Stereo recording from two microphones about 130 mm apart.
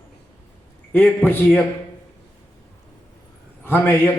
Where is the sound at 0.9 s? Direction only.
15° left (ahead or behind).